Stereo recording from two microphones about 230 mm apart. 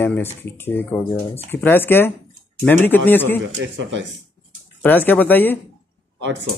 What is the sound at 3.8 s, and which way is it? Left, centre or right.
Speech, right.